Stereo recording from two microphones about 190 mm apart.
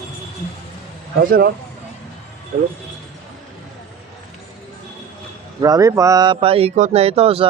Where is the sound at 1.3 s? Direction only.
55° right (ahead or behind).